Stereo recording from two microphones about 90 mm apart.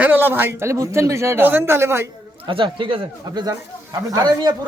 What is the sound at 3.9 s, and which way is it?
Speech, 45° right (ahead or behind).